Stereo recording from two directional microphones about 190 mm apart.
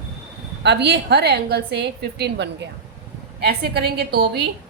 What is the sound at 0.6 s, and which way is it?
A woman's voice, 65° right (ahead or behind).